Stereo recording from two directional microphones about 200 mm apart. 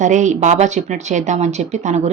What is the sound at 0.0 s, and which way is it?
Speech, 40° right (ahead or behind).